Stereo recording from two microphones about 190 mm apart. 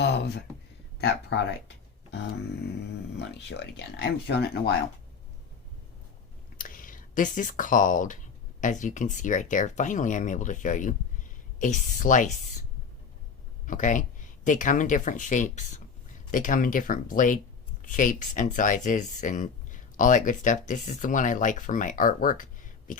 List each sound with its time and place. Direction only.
0.0 s a sound: 60° left (ahead or behind)
1.3 s speech: 65° left (ahead or behind)
3.2 s speech: 65° left (ahead or behind)
6.6 s a woman's voice: 45° left (ahead or behind)
13.7 s speech: 40° left (ahead or behind)